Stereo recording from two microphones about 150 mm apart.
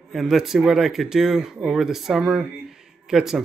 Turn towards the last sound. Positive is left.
turn(degrees=-5)  # may be behind; listen again after turning